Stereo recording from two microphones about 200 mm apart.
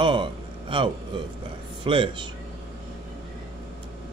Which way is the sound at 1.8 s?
25° right (ahead or behind).